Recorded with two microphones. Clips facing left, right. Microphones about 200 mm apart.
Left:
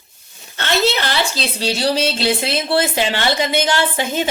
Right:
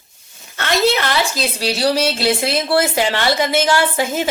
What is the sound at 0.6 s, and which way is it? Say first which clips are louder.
A woman's voice: right 2 dB; 30° left (ahead or behind).